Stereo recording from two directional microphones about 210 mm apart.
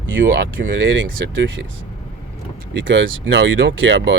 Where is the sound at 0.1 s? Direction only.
60° right (ahead or behind).